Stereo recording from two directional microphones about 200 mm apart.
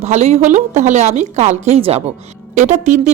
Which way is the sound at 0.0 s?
35° right (ahead or behind).